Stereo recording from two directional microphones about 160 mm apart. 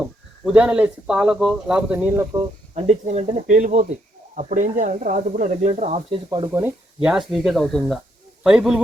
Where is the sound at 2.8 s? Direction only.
45° right (ahead or behind).